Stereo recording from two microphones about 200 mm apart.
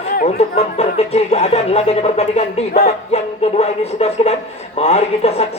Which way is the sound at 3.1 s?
30° left (ahead or behind).